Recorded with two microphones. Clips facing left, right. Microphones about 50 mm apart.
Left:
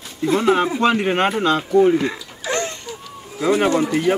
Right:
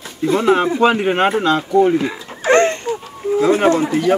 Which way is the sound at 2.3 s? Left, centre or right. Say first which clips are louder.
Right 11 dB; right.